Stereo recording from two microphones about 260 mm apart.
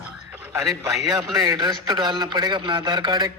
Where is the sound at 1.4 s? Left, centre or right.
Centre.